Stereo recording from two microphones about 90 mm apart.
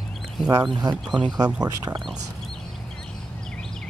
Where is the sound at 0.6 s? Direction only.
55° right (ahead or behind).